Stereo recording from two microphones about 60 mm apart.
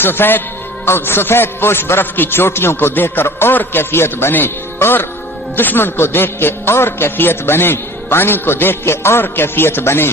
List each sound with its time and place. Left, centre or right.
0.0 s a man's voice: left